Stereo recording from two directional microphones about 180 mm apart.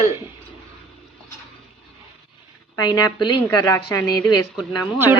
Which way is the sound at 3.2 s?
25° left (ahead or behind).